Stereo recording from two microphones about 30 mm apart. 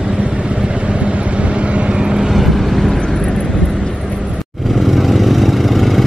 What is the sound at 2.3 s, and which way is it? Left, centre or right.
Vehicle, centre.